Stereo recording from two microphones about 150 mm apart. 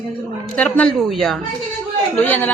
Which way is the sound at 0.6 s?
10° left (ahead or behind).